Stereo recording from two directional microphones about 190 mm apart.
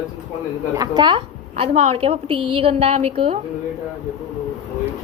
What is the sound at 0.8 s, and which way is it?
A woman's voice, 25° right (ahead or behind).